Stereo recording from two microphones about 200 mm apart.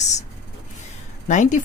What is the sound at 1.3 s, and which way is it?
Speech, 40° left (ahead or behind).